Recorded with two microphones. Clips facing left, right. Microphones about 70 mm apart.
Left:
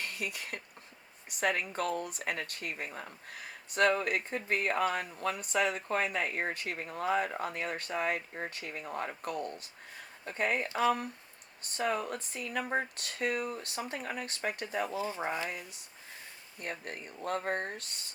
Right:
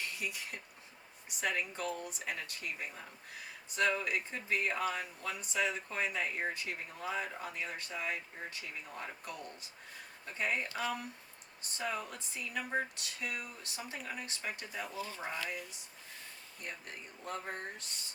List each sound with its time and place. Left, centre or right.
0.0 s speech: left
10.7 s speech: left
11.6 s speech: left
14.9 s speech: left
16.6 s speech: left